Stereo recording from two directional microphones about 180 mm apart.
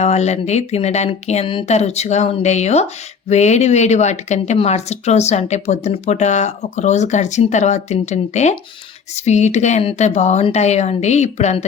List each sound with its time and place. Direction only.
0.0 s speech: 40° left (ahead or behind)